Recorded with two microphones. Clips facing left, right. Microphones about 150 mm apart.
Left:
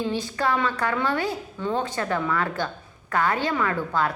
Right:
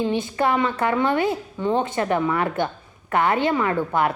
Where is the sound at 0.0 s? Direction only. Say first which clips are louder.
Right 4 dB; 20° right (ahead or behind).